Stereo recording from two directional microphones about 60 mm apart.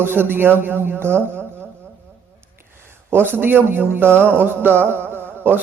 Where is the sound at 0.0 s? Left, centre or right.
Right.